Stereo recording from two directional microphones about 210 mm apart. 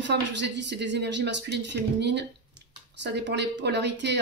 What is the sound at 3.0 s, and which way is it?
Speech, 55° right (ahead or behind).